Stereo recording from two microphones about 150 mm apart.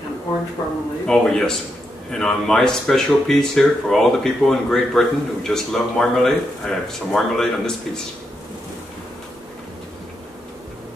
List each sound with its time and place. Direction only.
0.6 s speech: 25° left (ahead or behind)
1.0 s speech: 5° left (ahead or behind)